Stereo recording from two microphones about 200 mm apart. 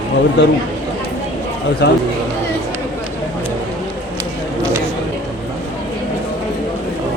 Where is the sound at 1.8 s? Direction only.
55° left (ahead or behind).